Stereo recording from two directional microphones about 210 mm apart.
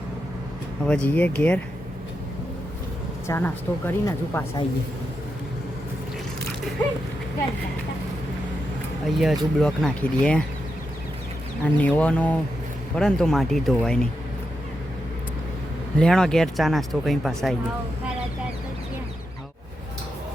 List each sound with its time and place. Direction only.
0.9 s speech: 5° left (ahead or behind)
3.2 s speech: 10° left (ahead or behind)
9.1 s speech: centre (ahead or behind)
11.8 s speech: 5° left (ahead or behind)
16.0 s speech: 5° left (ahead or behind)